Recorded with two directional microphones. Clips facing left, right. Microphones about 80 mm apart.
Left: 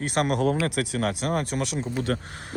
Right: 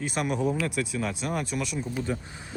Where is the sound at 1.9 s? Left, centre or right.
Left.